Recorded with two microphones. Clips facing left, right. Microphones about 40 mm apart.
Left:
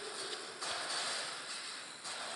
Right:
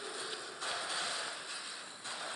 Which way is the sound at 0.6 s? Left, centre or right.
Right.